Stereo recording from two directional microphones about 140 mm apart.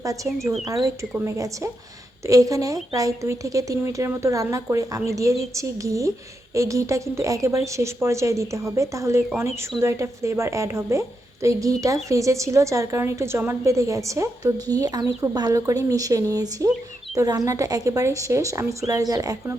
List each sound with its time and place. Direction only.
0.3 s speech: centre (ahead or behind)
1.1 s a woman's voice: 20° right (ahead or behind)